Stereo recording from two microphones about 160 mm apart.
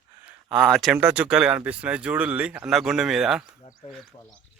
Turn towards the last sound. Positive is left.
turn(degrees=35)  # may be behind; listen again after turning